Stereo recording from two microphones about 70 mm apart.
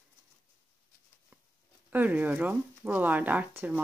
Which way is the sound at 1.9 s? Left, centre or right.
Right.